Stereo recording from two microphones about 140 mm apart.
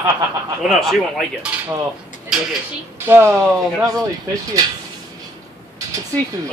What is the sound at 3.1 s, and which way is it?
Speech, 15° right (ahead or behind).